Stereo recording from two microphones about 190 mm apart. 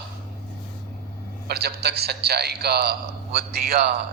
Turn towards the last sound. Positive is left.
turn(degrees=-55)  # may be behind; listen again after turning